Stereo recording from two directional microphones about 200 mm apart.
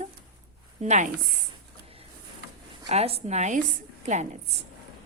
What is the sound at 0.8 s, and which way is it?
Speech, 40° right (ahead or behind).